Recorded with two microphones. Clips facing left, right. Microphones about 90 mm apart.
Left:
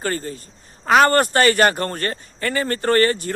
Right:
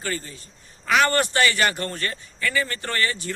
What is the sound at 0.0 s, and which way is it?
Speech, 45° left (ahead or behind).